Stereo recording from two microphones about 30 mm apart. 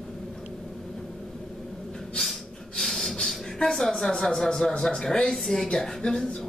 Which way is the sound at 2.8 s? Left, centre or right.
Centre.